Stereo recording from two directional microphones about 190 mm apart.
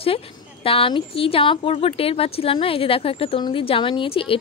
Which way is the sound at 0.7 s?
30° left (ahead or behind).